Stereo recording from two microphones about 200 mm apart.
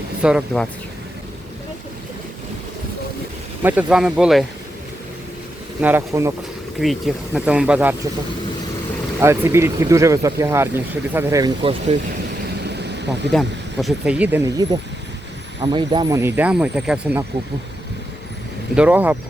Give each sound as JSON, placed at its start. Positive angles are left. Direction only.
{"t": 0.2, "sound": "speech", "side_deg": -5}
{"t": 3.6, "sound": "speech", "side_deg": -10}
{"t": 5.8, "sound": "speech", "side_deg": -10}
{"t": 6.8, "sound": "speech", "side_deg": 0}
{"t": 9.2, "sound": "speech", "side_deg": -15}
{"t": 12.6, "sound": "vehicle", "side_deg": -55}
{"t": 13.8, "sound": "speech", "side_deg": -5}
{"t": 18.8, "sound": "speech", "side_deg": -10}